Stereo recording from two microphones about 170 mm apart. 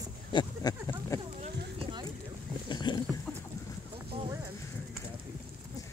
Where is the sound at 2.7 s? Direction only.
25° left (ahead or behind).